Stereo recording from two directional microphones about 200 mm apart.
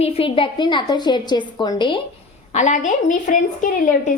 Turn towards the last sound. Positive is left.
turn(degrees=40)  # may be behind; listen again after turning